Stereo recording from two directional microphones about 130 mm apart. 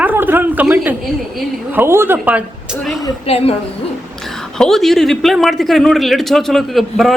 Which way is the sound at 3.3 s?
50° left (ahead or behind).